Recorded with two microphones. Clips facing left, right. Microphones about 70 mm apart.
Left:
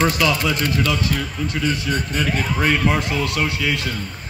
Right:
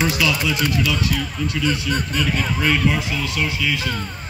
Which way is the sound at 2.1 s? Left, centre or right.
Left.